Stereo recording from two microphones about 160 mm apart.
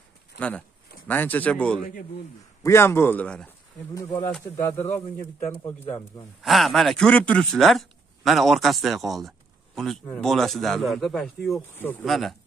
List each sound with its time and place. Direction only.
0.4 s a man's voice: 10° left (ahead or behind)
3.9 s speech: 20° left (ahead or behind)
6.4 s speech: centre (ahead or behind)
11.7 s speech: 15° left (ahead or behind)
12.0 s speech: centre (ahead or behind)